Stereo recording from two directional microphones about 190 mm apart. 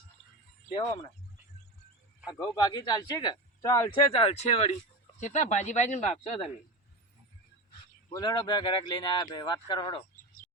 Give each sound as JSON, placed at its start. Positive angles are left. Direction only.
{"t": 0.7, "sound": "speech", "side_deg": 20}
{"t": 2.4, "sound": "speech", "side_deg": 20}
{"t": 4.2, "sound": "speech", "side_deg": 30}
{"t": 8.1, "sound": "speech", "side_deg": 20}